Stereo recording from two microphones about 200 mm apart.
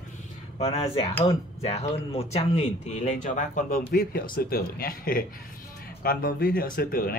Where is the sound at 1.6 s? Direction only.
30° left (ahead or behind).